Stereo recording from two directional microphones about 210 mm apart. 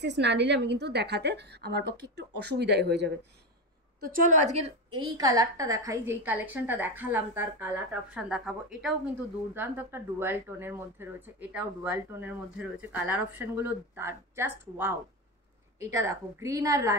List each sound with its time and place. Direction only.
0.0 s a woman's voice: 55° right (ahead or behind)
4.0 s a woman's voice: 40° right (ahead or behind); by 16.9 s 15° right (ahead or behind)